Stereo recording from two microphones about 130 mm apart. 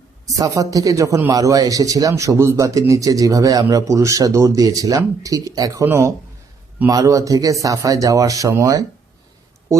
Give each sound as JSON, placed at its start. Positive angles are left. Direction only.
{"t": 0.3, "sound": "a man's voice", "side_deg": -30}